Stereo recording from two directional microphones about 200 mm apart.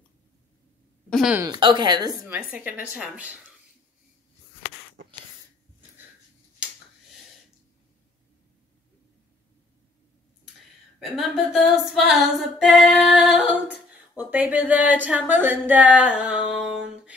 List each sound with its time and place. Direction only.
1.1 s a sound: centre (ahead or behind)
1.4 s speech: 20° right (ahead or behind)
2.2 s speech: 10° right (ahead or behind)
11.0 s a capella: centre (ahead or behind)